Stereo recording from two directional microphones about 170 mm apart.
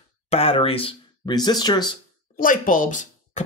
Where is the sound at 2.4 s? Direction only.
50° left (ahead or behind).